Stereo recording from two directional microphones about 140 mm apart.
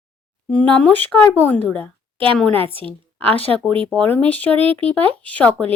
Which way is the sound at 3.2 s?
10° left (ahead or behind).